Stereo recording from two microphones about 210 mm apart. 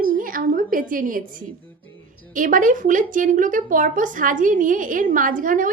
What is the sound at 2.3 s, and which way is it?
Speech, 40° right (ahead or behind).